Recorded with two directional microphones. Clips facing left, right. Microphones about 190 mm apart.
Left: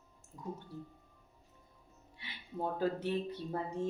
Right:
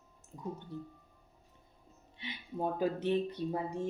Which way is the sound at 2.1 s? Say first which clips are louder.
Right 3 dB; 15° right (ahead or behind).